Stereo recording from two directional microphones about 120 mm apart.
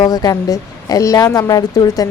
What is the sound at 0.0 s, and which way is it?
Speech, 35° left (ahead or behind).